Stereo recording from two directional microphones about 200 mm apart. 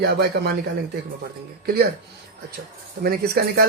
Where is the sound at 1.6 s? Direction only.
50° right (ahead or behind).